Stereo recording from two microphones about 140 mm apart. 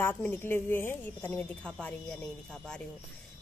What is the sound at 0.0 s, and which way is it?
A woman's voice, 15° left (ahead or behind).